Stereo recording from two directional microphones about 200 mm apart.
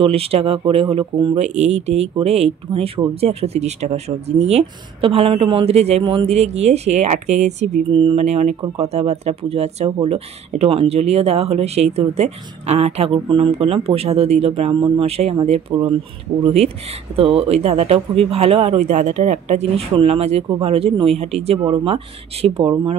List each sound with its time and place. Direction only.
0.0 s speech: 30° right (ahead or behind)